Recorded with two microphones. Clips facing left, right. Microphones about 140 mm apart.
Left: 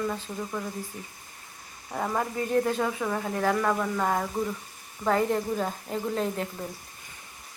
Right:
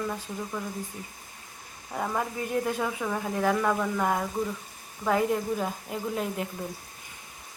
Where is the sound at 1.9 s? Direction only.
Centre (ahead or behind).